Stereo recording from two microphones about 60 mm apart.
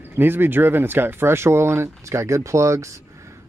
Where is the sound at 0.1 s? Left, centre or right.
Right.